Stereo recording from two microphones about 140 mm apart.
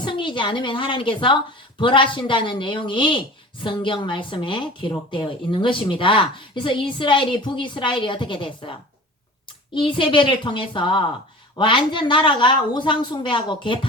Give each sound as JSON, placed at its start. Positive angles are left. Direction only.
{"t": 0.0, "sound": "a woman's voice", "side_deg": 35}
{"t": 9.8, "sound": "speech", "side_deg": 35}